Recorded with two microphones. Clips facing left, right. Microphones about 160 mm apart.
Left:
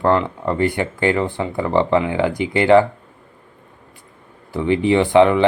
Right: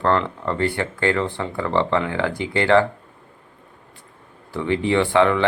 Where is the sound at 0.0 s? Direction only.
10° left (ahead or behind).